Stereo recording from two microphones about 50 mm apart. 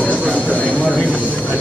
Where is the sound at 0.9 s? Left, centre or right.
Right.